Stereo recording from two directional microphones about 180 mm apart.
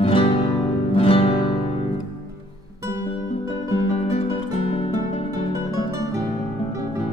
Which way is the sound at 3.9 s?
35° left (ahead or behind).